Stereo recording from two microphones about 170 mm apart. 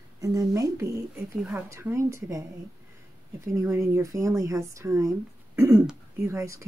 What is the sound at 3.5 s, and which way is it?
Speech, 15° right (ahead or behind).